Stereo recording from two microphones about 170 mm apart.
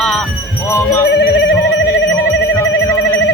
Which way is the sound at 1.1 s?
90° left.